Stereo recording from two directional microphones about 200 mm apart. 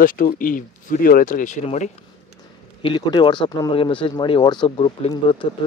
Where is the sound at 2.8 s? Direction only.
25° left (ahead or behind).